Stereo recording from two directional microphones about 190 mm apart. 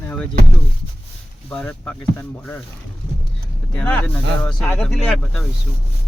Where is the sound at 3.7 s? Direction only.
5° left (ahead or behind).